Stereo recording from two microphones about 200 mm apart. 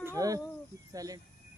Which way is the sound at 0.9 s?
15° right (ahead or behind).